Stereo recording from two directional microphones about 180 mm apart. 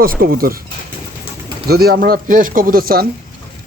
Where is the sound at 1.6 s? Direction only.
60° right (ahead or behind).